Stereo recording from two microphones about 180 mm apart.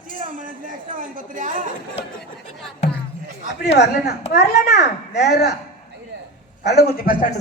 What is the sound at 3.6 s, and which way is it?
A child's voice, 70° left (ahead or behind).